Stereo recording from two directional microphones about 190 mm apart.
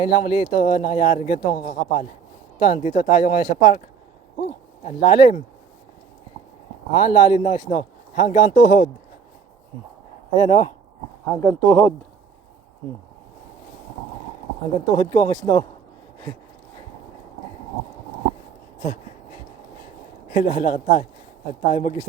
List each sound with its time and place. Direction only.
0.0 s a man's voice: 30° left (ahead or behind)
2.6 s a man's voice: 30° left (ahead or behind)
7.1 s a man's voice: 25° left (ahead or behind)
10.3 s speech: 25° left (ahead or behind)
11.3 s speech: 10° left (ahead or behind)
14.9 s speech: 15° left (ahead or behind)
18.8 s a sound: 30° left (ahead or behind)
20.3 s a man's voice: 30° left (ahead or behind)